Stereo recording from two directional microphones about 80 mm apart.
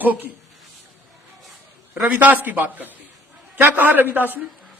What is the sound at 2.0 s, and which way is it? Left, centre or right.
A man's voice, right.